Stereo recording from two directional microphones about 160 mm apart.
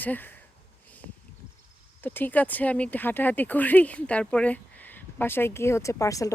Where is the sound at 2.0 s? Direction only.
10° left (ahead or behind).